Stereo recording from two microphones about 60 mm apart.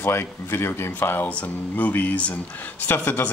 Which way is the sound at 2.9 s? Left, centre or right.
Left.